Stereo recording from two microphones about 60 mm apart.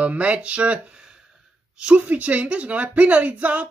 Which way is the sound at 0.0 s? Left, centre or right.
Right.